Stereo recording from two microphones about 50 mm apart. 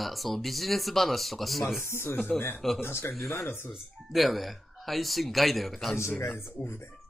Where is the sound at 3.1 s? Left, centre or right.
Centre.